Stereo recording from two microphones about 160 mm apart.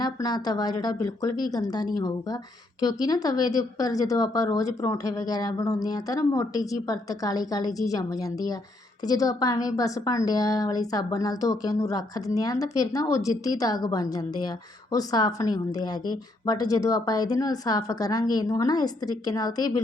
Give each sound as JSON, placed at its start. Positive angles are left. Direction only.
{"t": 0.0, "sound": "a woman's voice", "side_deg": 25}